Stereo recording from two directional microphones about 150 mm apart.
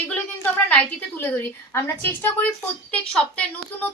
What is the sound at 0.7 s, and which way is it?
A woman's voice, 10° left (ahead or behind).